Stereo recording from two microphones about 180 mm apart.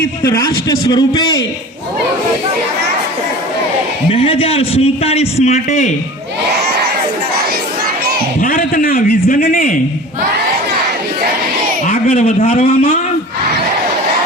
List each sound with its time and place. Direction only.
0.3 s a man's voice: 20° left (ahead or behind)
4.1 s a man's voice: 30° left (ahead or behind)
8.4 s a man's voice: 50° left (ahead or behind)
11.9 s a sound: 35° left (ahead or behind)
12.5 s a man's voice: 35° left (ahead or behind)